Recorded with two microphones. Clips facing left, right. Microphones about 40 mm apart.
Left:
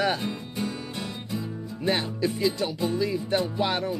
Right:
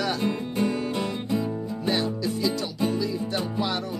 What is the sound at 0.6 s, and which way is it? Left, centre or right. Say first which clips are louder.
Music: right 8 dB; right.